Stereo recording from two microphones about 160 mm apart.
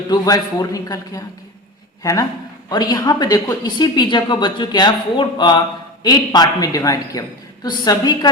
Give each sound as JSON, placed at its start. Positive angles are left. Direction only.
{"t": 0.1, "sound": "a woman's voice", "side_deg": 25}
{"t": 2.6, "sound": "a woman's voice", "side_deg": 25}